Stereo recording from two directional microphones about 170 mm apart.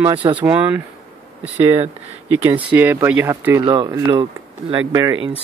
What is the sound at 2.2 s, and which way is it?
Speech, 10° right (ahead or behind).